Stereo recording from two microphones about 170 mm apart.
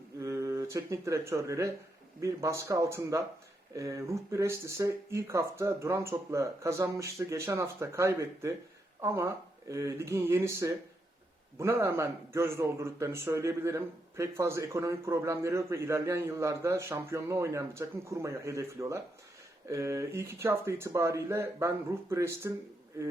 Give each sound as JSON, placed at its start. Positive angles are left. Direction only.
{"t": 0.2, "sound": "a man's voice", "side_deg": -15}